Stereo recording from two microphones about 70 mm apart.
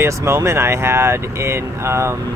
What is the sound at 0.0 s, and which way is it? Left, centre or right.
Speech, right.